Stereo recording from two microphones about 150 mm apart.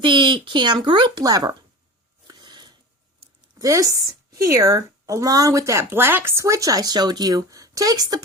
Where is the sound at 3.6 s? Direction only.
20° right (ahead or behind).